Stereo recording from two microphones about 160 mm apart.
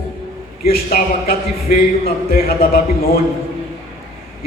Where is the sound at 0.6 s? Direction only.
70° left (ahead or behind).